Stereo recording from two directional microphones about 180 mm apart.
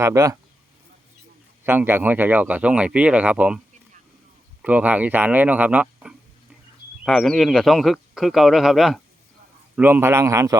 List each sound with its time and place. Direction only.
0.0 s speech: 15° right (ahead or behind)
1.6 s speech: 10° right (ahead or behind)
4.6 s speech: 10° right (ahead or behind)